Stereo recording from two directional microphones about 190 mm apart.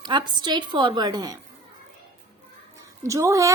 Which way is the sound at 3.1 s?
15° right (ahead or behind).